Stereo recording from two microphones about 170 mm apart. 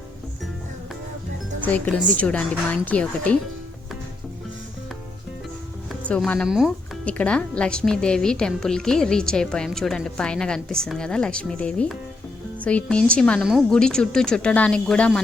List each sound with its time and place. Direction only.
1.6 s a woman's voice: 10° left (ahead or behind)
5.9 s speech: 5° left (ahead or behind)